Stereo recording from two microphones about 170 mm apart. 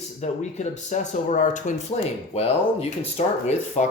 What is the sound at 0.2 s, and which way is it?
Speech, 45° left (ahead or behind).